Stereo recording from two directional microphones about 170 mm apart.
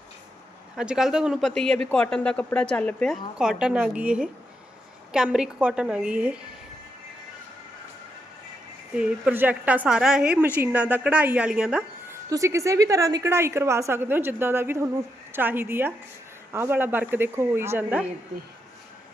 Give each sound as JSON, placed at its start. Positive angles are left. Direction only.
{"t": 0.8, "sound": "speech", "side_deg": -5}
{"t": 9.0, "sound": "a woman's voice", "side_deg": -5}
{"t": 12.3, "sound": "a woman's voice", "side_deg": -20}